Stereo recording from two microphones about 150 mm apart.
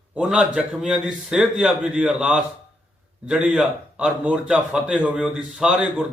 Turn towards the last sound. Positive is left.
turn(degrees=-5)  # may be behind; listen again after turning